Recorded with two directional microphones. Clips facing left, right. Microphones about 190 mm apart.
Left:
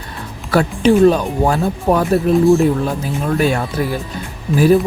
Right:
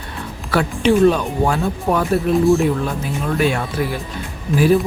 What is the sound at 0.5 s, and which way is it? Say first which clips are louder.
Speech: left 3 dB; 40° left (ahead or behind).